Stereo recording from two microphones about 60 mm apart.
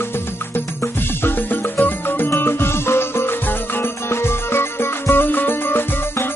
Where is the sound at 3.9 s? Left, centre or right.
Left.